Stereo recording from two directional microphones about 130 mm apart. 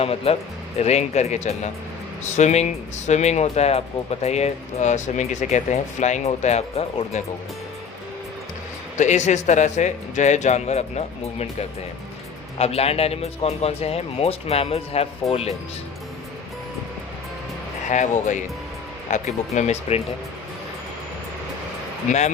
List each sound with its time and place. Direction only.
0.0 s speech: 50° left (ahead or behind)
9.0 s speech: 65° left (ahead or behind)
17.9 s speech: 70° left (ahead or behind)